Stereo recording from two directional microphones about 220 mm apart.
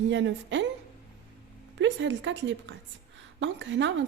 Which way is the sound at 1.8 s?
55° right (ahead or behind).